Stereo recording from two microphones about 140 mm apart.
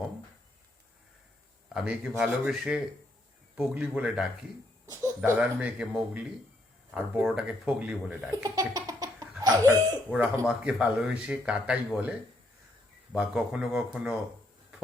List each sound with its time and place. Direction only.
1.7 s speech: 5° right (ahead or behind)
4.9 s speech: 20° right (ahead or behind)
5.4 s speech: 10° right (ahead or behind)
8.4 s a sound: 25° right (ahead or behind)
9.4 s laughter: 25° right (ahead or behind)
10.1 s speech: 15° right (ahead or behind)
13.1 s speech: 5° right (ahead or behind)